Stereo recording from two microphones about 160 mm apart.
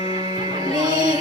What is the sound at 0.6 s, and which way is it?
Music, 25° right (ahead or behind).